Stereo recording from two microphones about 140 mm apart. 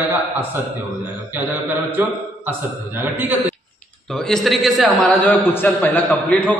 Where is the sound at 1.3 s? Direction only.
15° right (ahead or behind).